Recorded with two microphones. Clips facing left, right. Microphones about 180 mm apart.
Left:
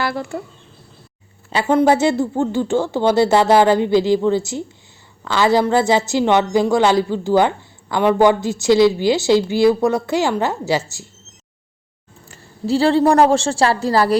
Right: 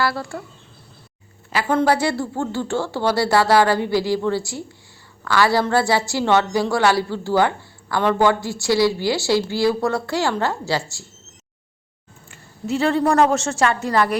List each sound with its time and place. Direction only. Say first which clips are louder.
0.0 s a woman's voice: left 1 dB; 20° left (ahead or behind)
1.5 s a woman's voice: left 4 dB; 25° left (ahead or behind)
12.3 s a woman's voice: left 5 dB; 30° left (ahead or behind)